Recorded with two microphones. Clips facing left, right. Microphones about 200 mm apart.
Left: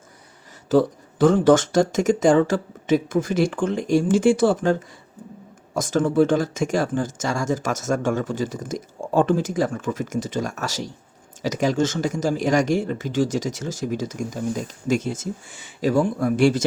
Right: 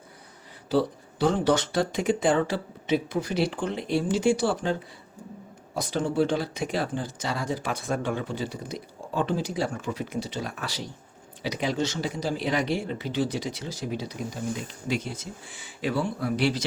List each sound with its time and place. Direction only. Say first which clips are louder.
0.7 s speech: left 6 dB; 50° left (ahead or behind)